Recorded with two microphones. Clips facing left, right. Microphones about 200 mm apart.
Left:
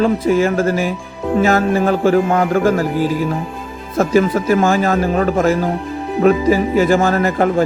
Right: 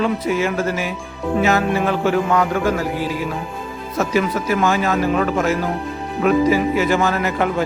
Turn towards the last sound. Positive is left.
turn(degrees=35)  # may be behind; listen again after turning